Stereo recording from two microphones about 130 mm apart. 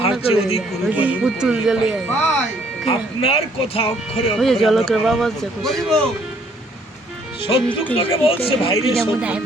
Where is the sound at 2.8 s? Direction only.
50° left (ahead or behind).